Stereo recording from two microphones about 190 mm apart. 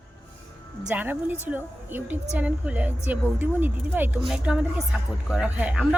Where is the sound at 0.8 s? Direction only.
10° right (ahead or behind).